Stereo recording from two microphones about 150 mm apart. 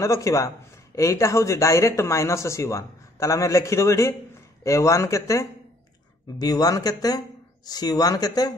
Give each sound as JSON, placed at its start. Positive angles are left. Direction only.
{"t": 0.0, "sound": "speech", "side_deg": 20}